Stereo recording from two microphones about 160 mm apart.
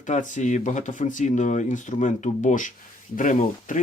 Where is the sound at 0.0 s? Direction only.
50° left (ahead or behind).